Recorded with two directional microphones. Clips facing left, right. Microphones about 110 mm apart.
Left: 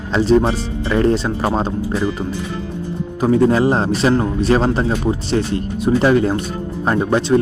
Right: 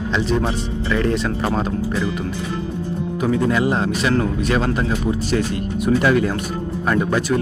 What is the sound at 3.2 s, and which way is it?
Speech, 35° left (ahead or behind).